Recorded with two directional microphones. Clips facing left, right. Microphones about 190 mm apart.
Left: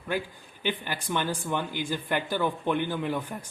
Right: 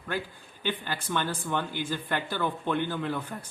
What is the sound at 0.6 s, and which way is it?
A man's voice, 15° left (ahead or behind).